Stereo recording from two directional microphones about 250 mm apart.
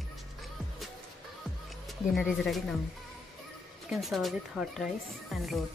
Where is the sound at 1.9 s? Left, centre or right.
Centre.